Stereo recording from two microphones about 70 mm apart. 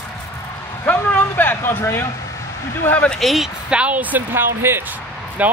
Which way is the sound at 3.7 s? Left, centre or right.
Centre.